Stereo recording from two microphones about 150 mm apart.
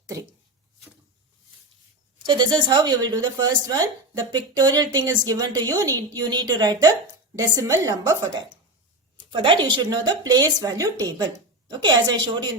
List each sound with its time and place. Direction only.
0.0 s speech: 20° right (ahead or behind)
2.2 s a woman's voice: 30° right (ahead or behind)
9.3 s a woman's voice: 35° right (ahead or behind)